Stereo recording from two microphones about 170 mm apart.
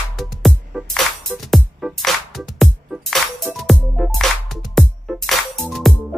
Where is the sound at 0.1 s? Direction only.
Centre (ahead or behind).